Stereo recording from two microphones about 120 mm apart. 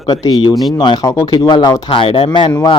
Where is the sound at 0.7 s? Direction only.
40° left (ahead or behind).